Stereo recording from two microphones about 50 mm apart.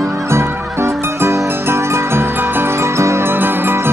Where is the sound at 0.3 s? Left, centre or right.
Right.